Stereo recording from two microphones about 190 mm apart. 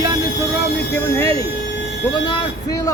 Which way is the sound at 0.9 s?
15° left (ahead or behind).